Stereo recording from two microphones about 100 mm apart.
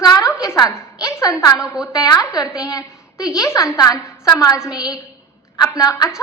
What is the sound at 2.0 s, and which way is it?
Speech, 40° left (ahead or behind).